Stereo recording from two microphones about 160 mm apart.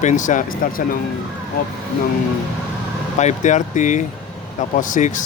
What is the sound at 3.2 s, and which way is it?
Speech, 50° left (ahead or behind).